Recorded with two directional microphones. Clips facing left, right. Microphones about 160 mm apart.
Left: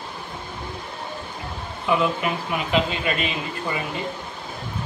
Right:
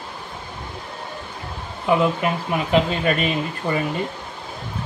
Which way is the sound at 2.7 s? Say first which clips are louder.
Right 4 dB; 45° right (ahead or behind).